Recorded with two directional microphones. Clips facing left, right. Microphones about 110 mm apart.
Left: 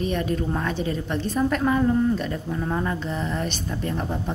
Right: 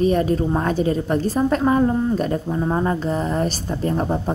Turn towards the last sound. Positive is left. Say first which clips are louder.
# right 6 dB
turn(degrees=-40)  # may be behind; listen again after turning